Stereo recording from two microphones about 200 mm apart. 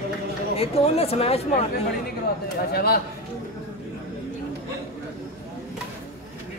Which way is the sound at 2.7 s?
50° left (ahead or behind).